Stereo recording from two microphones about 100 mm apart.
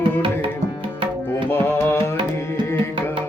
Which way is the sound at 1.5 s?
25° left (ahead or behind).